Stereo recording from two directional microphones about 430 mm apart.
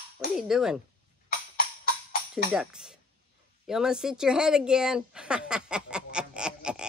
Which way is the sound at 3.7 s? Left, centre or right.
Centre.